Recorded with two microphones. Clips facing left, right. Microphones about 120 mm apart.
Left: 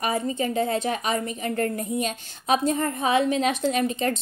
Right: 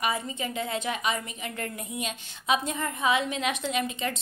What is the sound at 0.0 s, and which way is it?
A woman's voice, 40° left (ahead or behind).